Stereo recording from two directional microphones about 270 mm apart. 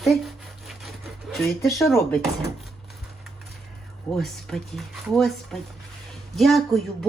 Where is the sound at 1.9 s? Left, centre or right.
Centre.